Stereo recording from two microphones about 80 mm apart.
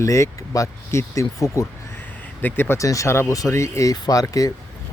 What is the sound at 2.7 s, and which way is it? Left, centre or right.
Speech, left.